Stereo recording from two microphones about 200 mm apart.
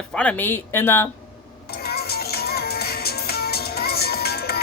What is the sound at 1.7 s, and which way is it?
Music, 50° left (ahead or behind).